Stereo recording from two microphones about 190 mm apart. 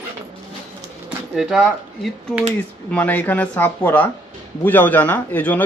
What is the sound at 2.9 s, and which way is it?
Speech, 10° left (ahead or behind).